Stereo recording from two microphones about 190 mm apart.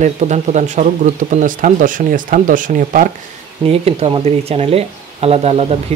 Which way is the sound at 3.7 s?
30° right (ahead or behind).